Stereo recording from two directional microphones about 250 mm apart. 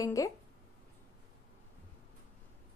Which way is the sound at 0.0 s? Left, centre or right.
Centre.